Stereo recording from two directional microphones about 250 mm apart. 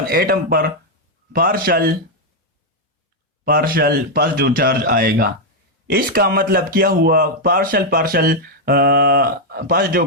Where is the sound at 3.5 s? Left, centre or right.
Right.